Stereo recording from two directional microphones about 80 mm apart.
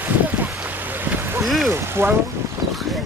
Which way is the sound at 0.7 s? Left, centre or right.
Right.